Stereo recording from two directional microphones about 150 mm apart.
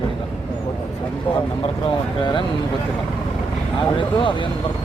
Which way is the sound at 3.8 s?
30° left (ahead or behind).